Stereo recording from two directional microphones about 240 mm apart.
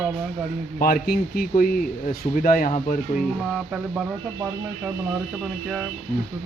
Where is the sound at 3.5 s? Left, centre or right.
Centre.